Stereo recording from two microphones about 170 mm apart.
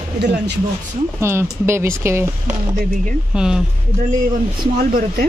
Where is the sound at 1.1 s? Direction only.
15° right (ahead or behind).